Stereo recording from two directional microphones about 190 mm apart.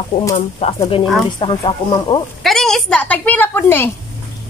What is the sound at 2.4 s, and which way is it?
A woman's voice, centre (ahead or behind).